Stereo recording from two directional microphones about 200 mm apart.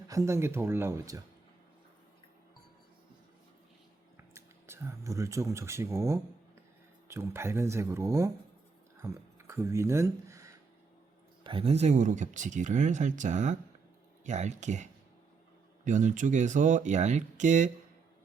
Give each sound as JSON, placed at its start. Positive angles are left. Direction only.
{"t": 0.1, "sound": "speech", "side_deg": -15}
{"t": 4.4, "sound": "speech", "side_deg": -10}
{"t": 9.0, "sound": "a sound", "side_deg": -15}
{"t": 11.4, "sound": "speech", "side_deg": -30}